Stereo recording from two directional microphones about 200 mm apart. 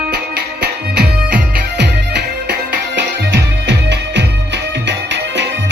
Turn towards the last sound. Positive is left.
turn(degrees=-60)  # may be behind; listen again after turning